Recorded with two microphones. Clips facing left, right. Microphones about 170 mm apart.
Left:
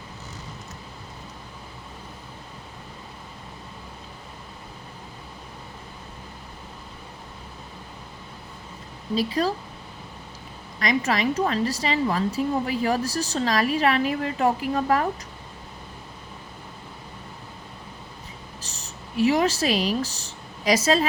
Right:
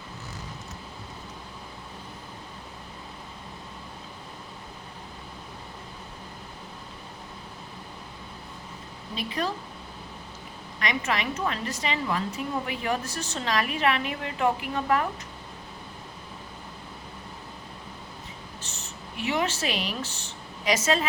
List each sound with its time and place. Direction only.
9.1 s speech: 35° left (ahead or behind)
10.8 s speech: 35° left (ahead or behind)
18.6 s speech: 35° left (ahead or behind)